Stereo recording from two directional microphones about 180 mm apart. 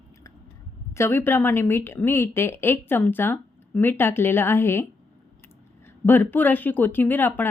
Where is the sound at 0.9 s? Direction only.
15° left (ahead or behind).